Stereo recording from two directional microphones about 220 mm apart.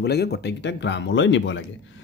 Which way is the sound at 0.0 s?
50° left (ahead or behind).